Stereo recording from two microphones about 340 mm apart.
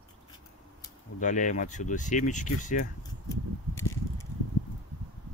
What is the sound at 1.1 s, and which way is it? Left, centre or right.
Speech, left.